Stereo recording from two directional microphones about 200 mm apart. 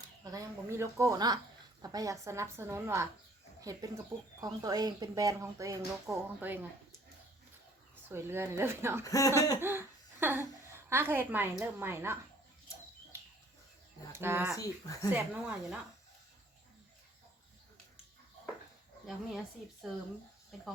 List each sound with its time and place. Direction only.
0.3 s speech: 15° right (ahead or behind)
8.1 s speech: 10° right (ahead or behind)
9.0 s speech: 15° left (ahead or behind)
9.6 s speech: 10° right (ahead or behind)
14.1 s speech: 10° right (ahead or behind)
14.5 s speech: 15° left (ahead or behind)
15.1 s speech: 5° right (ahead or behind)
19.8 s speech: centre (ahead or behind)